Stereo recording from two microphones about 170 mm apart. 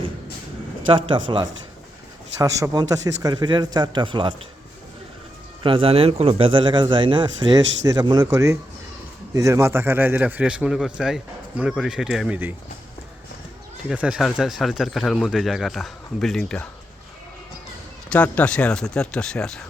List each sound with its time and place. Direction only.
1.1 s speech: 30° right (ahead or behind)
5.6 s a man's voice: 30° right (ahead or behind); by 12.4 s 5° right (ahead or behind)
13.8 s speech: 5° right (ahead or behind)
18.1 s speech: 5° left (ahead or behind)